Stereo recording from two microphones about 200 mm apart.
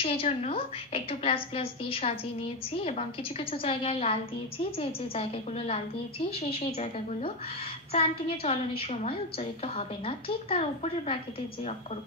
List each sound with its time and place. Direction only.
0.0 s a woman's voice: 30° left (ahead or behind)